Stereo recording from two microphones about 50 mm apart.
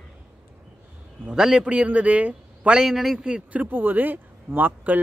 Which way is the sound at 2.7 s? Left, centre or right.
Centre.